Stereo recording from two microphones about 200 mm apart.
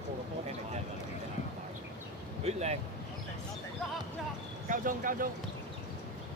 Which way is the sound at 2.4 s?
35° right (ahead or behind).